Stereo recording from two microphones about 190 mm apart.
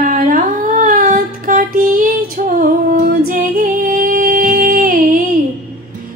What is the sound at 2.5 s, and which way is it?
Female singing, 45° right (ahead or behind).